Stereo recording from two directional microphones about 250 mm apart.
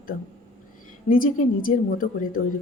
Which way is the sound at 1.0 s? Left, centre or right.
Left.